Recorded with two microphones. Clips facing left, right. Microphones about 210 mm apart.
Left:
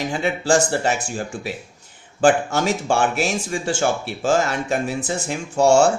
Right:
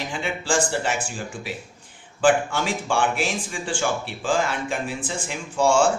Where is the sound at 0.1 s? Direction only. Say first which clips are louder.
Left 6 dB; 40° left (ahead or behind).